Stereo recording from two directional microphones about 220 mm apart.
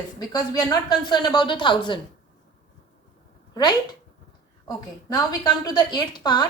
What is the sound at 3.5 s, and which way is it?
Speech, 20° left (ahead or behind).